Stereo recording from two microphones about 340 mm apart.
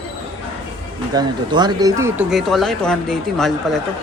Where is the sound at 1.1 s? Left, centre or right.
Centre.